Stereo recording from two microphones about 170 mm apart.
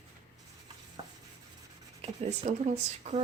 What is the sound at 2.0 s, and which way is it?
Speech, 40° right (ahead or behind).